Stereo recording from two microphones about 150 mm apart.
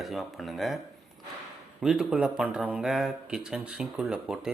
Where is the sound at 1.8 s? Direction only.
5° right (ahead or behind).